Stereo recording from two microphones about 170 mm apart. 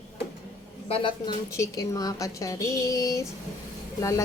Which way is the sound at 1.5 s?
20° left (ahead or behind).